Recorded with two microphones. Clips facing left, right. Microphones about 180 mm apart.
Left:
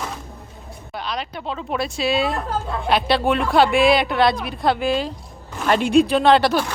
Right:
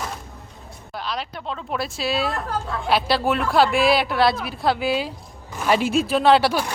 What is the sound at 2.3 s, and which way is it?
Speech, 20° left (ahead or behind).